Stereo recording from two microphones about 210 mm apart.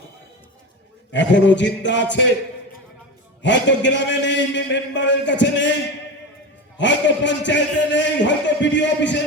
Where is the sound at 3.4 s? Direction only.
60° left (ahead or behind).